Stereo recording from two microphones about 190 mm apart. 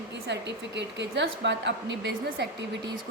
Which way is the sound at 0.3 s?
65° right (ahead or behind).